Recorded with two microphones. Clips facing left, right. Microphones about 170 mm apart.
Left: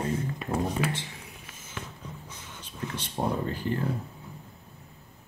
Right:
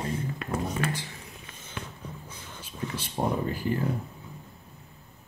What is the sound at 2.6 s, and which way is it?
Speech, 10° right (ahead or behind).